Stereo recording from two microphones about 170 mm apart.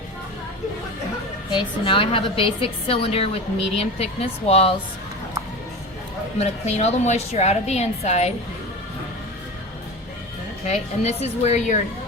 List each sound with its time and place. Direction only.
1.5 s a woman's voice: 30° left (ahead or behind)
6.4 s a woman's voice: 40° left (ahead or behind)
10.7 s a woman's voice: 40° left (ahead or behind)